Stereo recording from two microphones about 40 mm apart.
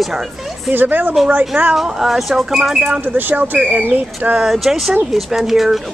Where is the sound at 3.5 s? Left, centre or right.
Right.